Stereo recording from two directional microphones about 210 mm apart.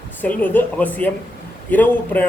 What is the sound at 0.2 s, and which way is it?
A man's voice, 10° left (ahead or behind).